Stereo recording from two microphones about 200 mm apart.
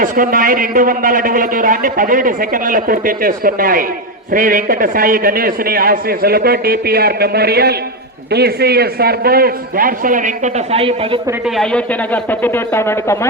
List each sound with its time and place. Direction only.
0.0 s a man's voice: 40° right (ahead or behind); by 11.2 s 25° right (ahead or behind)
11.4 s speech: centre (ahead or behind)